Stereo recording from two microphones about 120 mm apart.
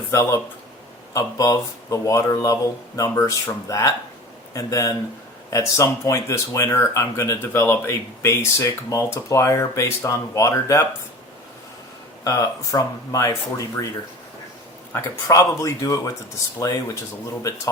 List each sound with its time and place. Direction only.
0.1 s speech: 20° left (ahead or behind)
12.2 s speech: 30° left (ahead or behind)
14.9 s speech: 25° left (ahead or behind)